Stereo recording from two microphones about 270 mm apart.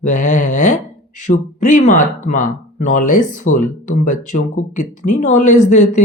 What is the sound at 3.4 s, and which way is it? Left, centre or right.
Speech, left.